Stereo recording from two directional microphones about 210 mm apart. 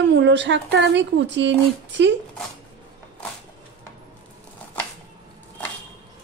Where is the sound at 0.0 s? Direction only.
55° right (ahead or behind).